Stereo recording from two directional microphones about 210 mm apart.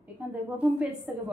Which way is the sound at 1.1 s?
5° right (ahead or behind).